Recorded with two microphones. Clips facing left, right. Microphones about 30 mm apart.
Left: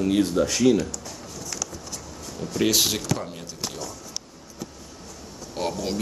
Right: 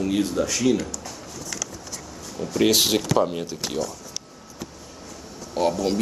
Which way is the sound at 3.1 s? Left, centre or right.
Right.